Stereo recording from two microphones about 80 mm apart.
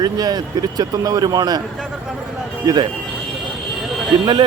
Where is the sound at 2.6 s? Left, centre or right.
Right.